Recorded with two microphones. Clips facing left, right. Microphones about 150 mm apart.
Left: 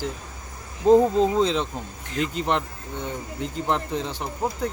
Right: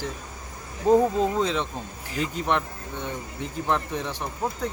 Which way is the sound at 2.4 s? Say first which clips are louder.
Even; 20° left (ahead or behind).